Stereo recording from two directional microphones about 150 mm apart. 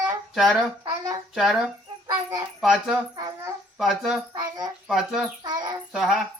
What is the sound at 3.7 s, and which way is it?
A woman's voice, centre (ahead or behind).